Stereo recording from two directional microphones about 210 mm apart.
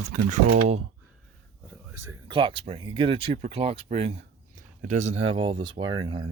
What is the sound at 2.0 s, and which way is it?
Speech, 20° right (ahead or behind).